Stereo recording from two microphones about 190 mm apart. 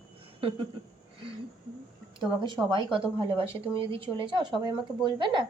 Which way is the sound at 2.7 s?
25° right (ahead or behind).